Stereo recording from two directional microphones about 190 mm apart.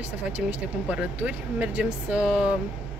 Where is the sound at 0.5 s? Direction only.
5° right (ahead or behind).